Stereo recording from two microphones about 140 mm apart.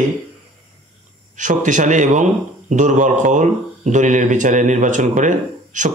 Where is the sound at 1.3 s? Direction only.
65° right (ahead or behind).